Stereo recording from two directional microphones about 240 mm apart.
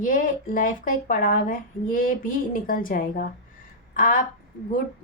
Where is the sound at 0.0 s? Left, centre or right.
Left.